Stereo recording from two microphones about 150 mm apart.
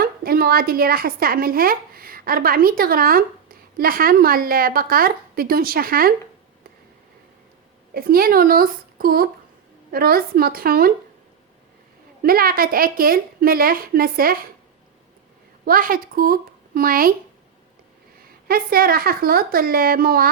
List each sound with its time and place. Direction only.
0.0 s a woman's voice: 85° right
7.9 s a woman's voice: 85° right
12.2 s a woman's voice: 80° right
15.6 s speech: 75° right (ahead or behind)
18.4 s a woman's voice: 80° right